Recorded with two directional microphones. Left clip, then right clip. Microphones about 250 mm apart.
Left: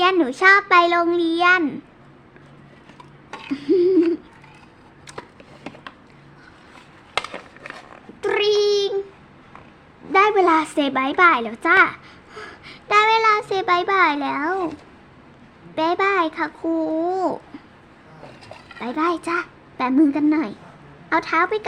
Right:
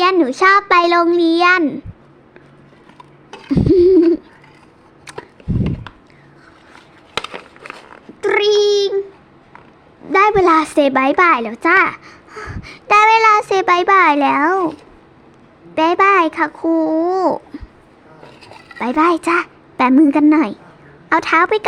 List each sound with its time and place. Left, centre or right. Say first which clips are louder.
0.0 s a child's voice: right 4 dB; centre
3.5 s a sound: right 7 dB; centre
7.3 s a sound: right 4 dB; right
8.2 s cat: right 5 dB; centre
10.1 s a child's voice: right 4 dB; centre
15.7 s a child's voice: right 7 dB; right
18.7 s a woman's voice: right 8 dB; right